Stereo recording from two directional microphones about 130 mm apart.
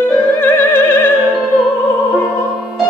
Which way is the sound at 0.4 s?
15° left (ahead or behind).